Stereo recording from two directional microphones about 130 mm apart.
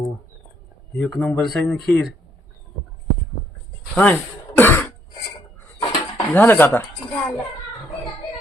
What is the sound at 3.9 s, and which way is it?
Cough, 15° left (ahead or behind).